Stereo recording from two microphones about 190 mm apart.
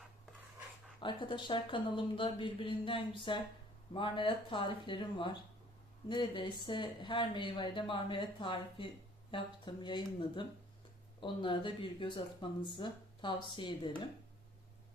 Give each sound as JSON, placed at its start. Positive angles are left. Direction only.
{"t": 1.0, "sound": "speech", "side_deg": 25}